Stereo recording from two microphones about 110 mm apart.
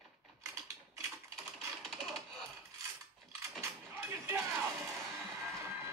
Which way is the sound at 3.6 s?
25° right (ahead or behind).